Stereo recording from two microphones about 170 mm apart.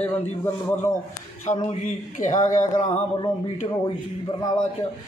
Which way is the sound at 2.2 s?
50° left (ahead or behind).